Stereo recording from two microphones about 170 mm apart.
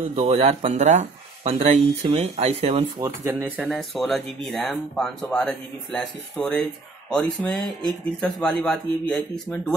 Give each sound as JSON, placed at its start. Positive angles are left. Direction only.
{"t": 0.1, "sound": "speech", "side_deg": -35}
{"t": 3.0, "sound": "speech", "side_deg": -15}
{"t": 3.6, "sound": "speech", "side_deg": 0}